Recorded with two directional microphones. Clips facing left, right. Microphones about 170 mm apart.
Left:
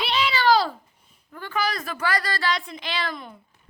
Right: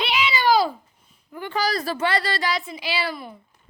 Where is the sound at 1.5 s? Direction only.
35° right (ahead or behind).